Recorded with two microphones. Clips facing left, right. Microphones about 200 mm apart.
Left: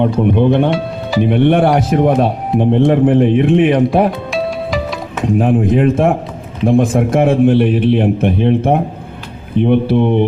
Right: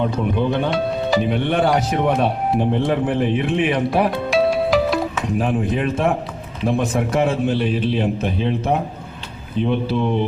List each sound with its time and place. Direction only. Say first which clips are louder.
0.2 s speech: left 8 dB; 55° left (ahead or behind)
4.3 s music: right 2 dB; centre (ahead or behind)
5.1 s speech: left 7 dB; 55° left (ahead or behind)
6.9 s speech: left 7 dB; 50° left (ahead or behind)